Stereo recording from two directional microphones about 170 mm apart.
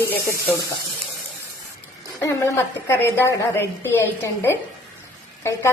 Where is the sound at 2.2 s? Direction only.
15° left (ahead or behind).